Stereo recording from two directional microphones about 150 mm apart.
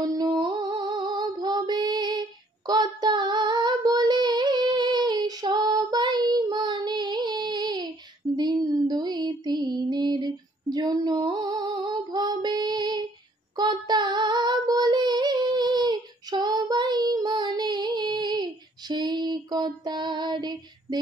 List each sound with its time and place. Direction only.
0.0 s music: 30° right (ahead or behind)
13.6 s child singing: 30° right (ahead or behind)